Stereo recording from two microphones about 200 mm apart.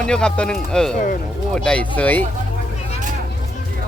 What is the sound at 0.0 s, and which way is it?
Speech, 5° left (ahead or behind).